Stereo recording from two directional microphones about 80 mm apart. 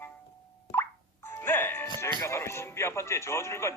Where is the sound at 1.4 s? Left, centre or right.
Left.